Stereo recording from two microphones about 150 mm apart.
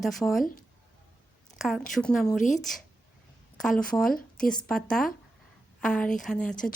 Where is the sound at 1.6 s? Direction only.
Centre (ahead or behind).